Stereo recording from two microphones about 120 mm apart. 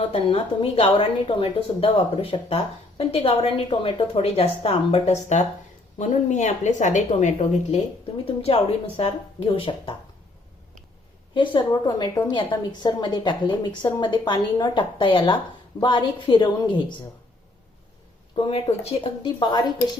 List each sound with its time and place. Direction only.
0.1 s a woman's voice: 50° left (ahead or behind); by 5.4 s 70° left (ahead or behind)
6.0 s speech: 80° left
8.2 s speech: 55° left (ahead or behind)
11.7 s a woman's voice: 30° left (ahead or behind)
18.3 s a woman's voice: 55° left (ahead or behind)
19.2 s a woman's voice: 40° left (ahead or behind)